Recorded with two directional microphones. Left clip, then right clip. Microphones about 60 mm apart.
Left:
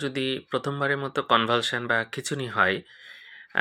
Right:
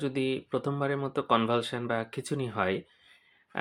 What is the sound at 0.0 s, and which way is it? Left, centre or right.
Speech, right.